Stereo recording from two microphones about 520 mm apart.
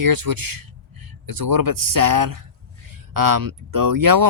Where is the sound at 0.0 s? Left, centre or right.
Right.